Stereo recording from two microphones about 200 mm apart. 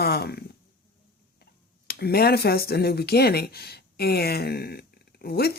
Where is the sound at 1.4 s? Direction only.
50° left (ahead or behind).